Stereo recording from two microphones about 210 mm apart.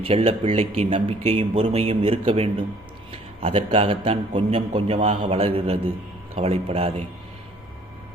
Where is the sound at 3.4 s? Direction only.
25° right (ahead or behind).